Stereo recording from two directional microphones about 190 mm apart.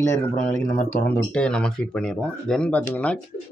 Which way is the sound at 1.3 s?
5° left (ahead or behind).